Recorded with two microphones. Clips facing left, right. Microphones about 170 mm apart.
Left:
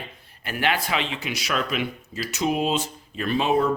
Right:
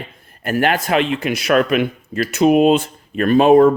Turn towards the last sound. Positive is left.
turn(degrees=-50)  # may be behind; listen again after turning